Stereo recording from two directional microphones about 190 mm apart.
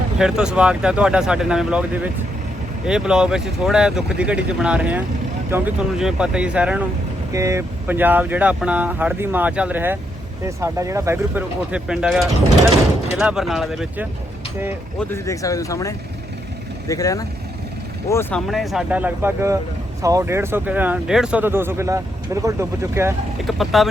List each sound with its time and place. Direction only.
0.2 s speech: 5° right (ahead or behind)
15.1 s speech: 15° left (ahead or behind); by 23.1 s 15° right (ahead or behind)
23.5 s speech: centre (ahead or behind)